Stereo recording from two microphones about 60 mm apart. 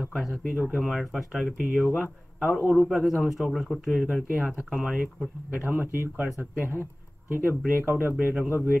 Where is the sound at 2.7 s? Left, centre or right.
Centre.